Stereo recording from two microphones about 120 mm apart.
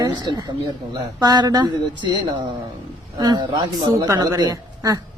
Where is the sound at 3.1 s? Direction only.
35° right (ahead or behind).